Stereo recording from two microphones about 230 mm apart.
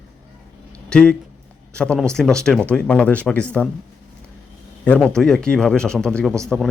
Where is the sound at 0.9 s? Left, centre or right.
Centre.